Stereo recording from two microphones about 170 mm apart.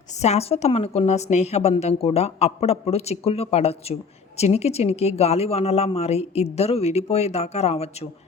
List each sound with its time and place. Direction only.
0.1 s a woman's voice: 40° left (ahead or behind)